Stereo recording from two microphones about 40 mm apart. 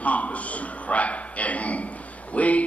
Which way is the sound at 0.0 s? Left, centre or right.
Left.